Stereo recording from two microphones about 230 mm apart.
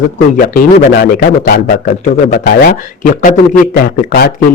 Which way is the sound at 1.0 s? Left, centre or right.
Left.